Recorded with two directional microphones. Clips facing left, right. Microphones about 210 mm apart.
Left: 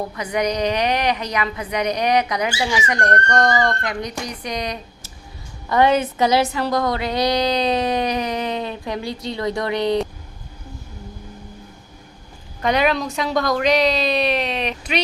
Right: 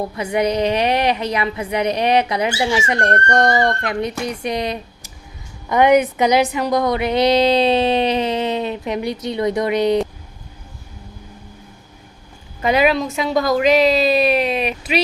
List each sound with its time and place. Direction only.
0.2 s a woman's voice: 25° right (ahead or behind)
12.6 s a woman's voice: 5° right (ahead or behind)